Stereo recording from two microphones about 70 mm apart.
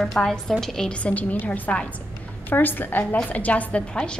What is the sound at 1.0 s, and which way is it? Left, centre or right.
A woman's voice, left.